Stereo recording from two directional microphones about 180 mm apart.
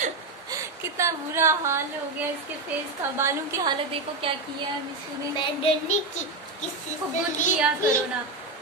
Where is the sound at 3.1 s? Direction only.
15° right (ahead or behind).